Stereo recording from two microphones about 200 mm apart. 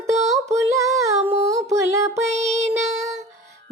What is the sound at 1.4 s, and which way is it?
Music, 15° right (ahead or behind).